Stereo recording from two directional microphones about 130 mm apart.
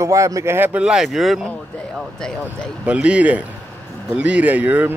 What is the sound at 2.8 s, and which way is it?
Speech, 10° right (ahead or behind).